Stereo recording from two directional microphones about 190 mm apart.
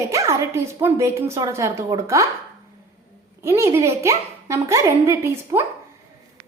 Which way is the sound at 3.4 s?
15° right (ahead or behind).